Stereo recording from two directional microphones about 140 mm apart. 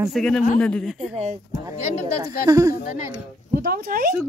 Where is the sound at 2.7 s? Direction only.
90° left.